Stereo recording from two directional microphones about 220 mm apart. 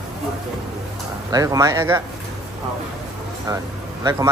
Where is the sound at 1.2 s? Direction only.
15° right (ahead or behind).